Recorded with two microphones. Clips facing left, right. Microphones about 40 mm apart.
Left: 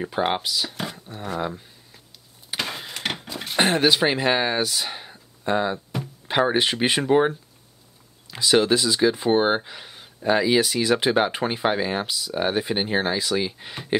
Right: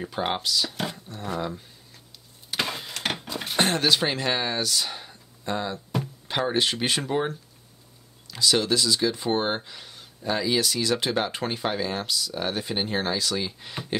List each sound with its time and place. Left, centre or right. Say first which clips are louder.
0.0 s speech: left 4 dB; centre
0.9 s a sound: left 1 dB; centre
2.5 s printer: even; centre
3.5 s speech: left 3 dB; centre